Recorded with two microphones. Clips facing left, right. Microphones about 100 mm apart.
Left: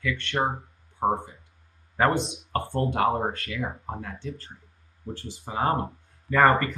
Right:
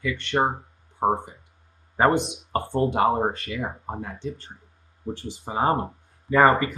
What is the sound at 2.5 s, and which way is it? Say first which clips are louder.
Speech: right 4 dB; 15° right (ahead or behind).